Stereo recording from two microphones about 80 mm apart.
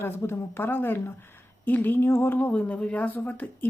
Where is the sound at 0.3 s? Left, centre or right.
Left.